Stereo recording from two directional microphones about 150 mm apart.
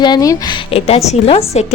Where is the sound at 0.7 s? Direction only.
40° left (ahead or behind).